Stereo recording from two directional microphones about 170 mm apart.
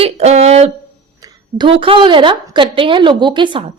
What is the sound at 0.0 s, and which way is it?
A woman's voice, 40° right (ahead or behind).